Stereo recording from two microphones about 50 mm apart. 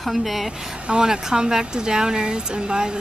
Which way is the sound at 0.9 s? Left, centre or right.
Centre.